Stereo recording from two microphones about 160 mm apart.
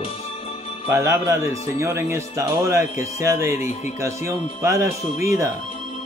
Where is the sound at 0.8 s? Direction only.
20° right (ahead or behind).